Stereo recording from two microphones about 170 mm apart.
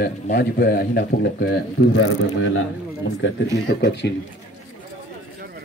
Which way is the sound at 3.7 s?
90° left.